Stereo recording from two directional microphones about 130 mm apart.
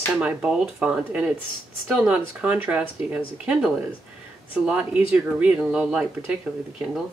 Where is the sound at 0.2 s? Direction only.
10° right (ahead or behind).